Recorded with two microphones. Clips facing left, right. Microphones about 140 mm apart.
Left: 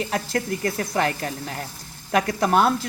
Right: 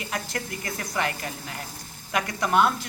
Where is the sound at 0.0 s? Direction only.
35° left (ahead or behind).